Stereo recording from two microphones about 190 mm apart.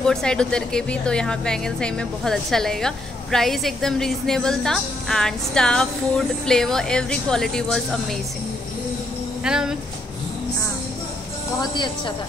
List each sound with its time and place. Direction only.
0.0 s a woman's voice: 5° left (ahead or behind)
9.4 s a woman's voice: 5° right (ahead or behind)
11.6 s a woman's voice: 25° left (ahead or behind)